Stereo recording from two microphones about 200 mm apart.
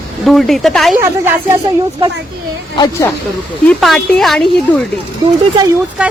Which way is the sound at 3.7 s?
Centre (ahead or behind).